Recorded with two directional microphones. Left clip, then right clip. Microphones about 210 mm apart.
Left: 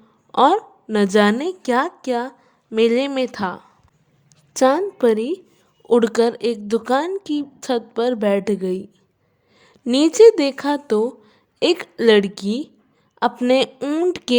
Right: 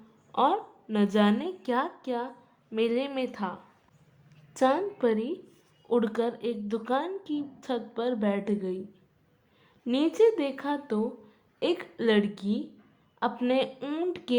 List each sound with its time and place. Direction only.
0.3 s a woman's voice: 40° left (ahead or behind)